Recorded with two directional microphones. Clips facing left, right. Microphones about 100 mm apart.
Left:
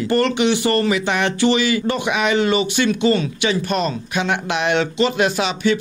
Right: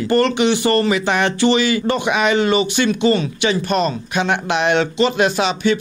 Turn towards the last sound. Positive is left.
turn(degrees=-30)  # may be behind; listen again after turning